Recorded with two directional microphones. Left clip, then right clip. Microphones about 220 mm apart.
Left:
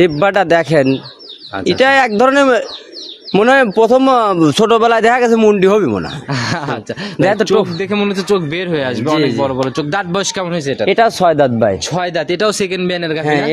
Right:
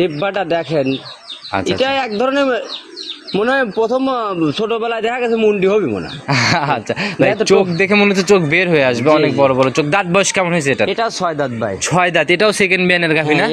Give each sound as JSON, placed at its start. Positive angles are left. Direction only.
{"t": 0.0, "sound": "a man's voice", "side_deg": 50}
{"t": 6.3, "sound": "speech", "side_deg": -5}
{"t": 7.2, "sound": "a man's voice", "side_deg": 45}
{"t": 7.7, "sound": "speech", "side_deg": -5}
{"t": 9.9, "sound": "a man's voice", "side_deg": 15}
{"t": 10.3, "sound": "speech", "side_deg": 0}
{"t": 10.9, "sound": "a man's voice", "side_deg": 45}
{"t": 11.9, "sound": "speech", "side_deg": -5}